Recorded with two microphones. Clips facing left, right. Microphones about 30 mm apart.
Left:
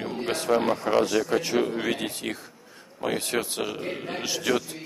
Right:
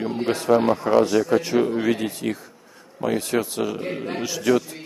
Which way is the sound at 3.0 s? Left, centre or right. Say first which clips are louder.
Right 4 dB; left.